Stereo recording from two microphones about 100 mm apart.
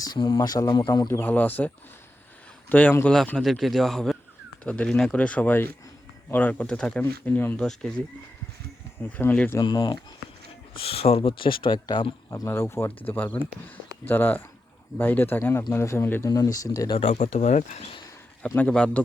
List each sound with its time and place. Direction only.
0.3 s a man's voice: 40° left (ahead or behind)
1.0 s speech: 20° left (ahead or behind)
3.2 s a man's voice: 5° left (ahead or behind)
9.0 s speech: 15° left (ahead or behind)
10.8 s speech: 75° left (ahead or behind); by 11.3 s 90° left
11.3 s speech: 55° left (ahead or behind)
12.5 s speech: 30° left (ahead or behind)
13.1 s speech: 20° left (ahead or behind)
16.2 s speech: 35° left (ahead or behind)
17.2 s speech: 90° left
18.4 s speech: 10° left (ahead or behind)